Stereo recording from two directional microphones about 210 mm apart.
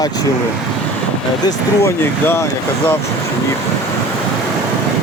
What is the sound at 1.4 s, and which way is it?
Speech, 15° left (ahead or behind).